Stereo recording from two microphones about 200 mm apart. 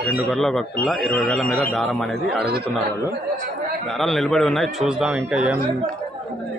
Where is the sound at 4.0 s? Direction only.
Centre (ahead or behind).